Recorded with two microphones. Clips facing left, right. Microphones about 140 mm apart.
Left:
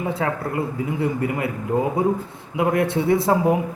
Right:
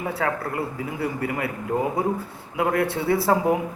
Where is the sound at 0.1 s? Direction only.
20° left (ahead or behind).